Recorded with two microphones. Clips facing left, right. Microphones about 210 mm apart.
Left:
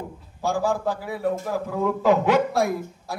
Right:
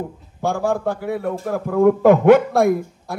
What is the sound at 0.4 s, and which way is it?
Speech, 55° right (ahead or behind).